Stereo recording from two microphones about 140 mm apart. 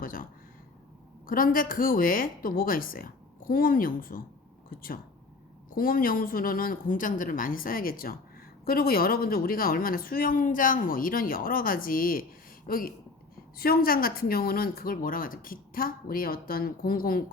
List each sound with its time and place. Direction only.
0.0 s speech: 90° left
1.3 s speech: 85° left